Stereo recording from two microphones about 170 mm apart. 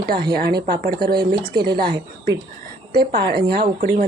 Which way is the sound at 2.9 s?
70° right (ahead or behind).